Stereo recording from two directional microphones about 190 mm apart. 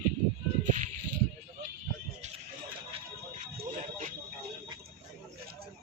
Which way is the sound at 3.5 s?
45° right (ahead or behind).